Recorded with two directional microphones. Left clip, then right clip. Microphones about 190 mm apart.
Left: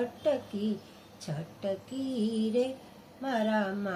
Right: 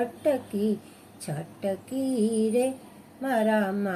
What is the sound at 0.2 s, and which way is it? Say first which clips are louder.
Female singing: right 4 dB; 15° right (ahead or behind).